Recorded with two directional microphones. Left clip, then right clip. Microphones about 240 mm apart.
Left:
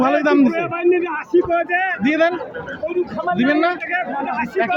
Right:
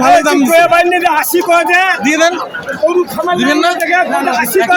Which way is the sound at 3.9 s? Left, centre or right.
Right.